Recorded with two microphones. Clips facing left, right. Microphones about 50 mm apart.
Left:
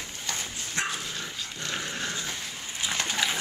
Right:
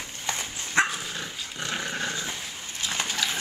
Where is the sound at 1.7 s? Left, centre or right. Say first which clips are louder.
Right 3 dB; centre.